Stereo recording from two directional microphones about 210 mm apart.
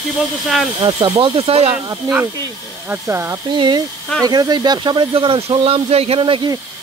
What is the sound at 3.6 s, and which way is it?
Speech, 25° right (ahead or behind).